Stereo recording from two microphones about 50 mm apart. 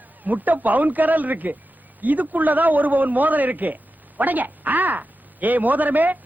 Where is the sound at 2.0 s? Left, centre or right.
Right.